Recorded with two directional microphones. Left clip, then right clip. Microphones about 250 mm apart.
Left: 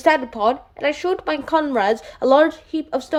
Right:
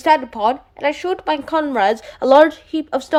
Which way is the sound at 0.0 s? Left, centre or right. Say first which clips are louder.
Right 2 dB; centre.